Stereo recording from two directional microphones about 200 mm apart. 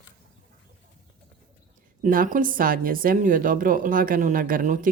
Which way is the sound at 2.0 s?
40° right (ahead or behind).